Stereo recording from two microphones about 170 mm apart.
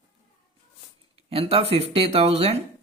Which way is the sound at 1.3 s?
35° right (ahead or behind).